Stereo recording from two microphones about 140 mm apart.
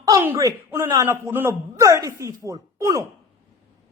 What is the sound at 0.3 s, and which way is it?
A man's voice, 20° right (ahead or behind).